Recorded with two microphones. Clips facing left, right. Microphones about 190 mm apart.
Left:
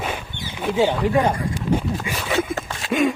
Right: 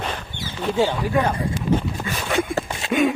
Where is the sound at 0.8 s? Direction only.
20° left (ahead or behind).